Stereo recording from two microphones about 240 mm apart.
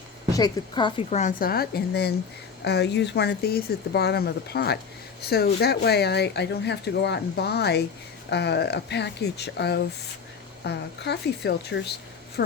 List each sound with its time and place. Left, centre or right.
0.3 s a woman's voice: centre; by 11.9 s left